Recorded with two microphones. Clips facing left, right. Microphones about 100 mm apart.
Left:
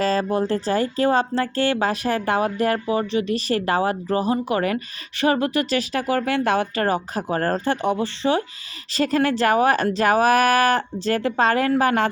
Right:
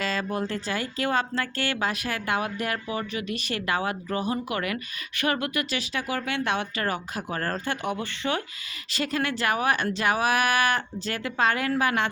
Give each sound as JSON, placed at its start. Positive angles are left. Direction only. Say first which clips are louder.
{"t": 0.0, "sound": "speech", "louder": "left 8 dB", "side_deg": 35}